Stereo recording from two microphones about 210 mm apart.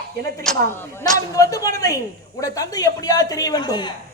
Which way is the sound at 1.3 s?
15° left (ahead or behind).